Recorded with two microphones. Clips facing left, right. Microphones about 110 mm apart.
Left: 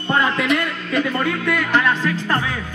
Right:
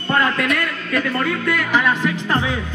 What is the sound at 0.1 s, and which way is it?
A man's voice, 15° left (ahead or behind).